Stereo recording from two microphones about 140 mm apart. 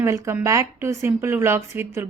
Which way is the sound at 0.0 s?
20° right (ahead or behind).